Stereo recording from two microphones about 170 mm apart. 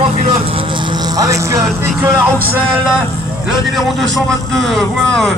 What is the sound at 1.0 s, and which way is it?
Speech, 20° right (ahead or behind).